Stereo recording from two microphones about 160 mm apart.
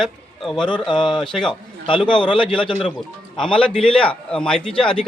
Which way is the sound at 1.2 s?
5° left (ahead or behind).